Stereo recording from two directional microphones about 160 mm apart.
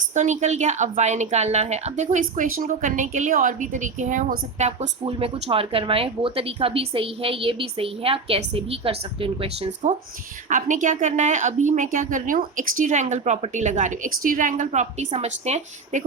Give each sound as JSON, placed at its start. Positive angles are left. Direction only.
{"t": 0.1, "sound": "a woman's voice", "side_deg": -50}
{"t": 5.0, "sound": "speech", "side_deg": -35}
{"t": 10.5, "sound": "a woman's voice", "side_deg": -50}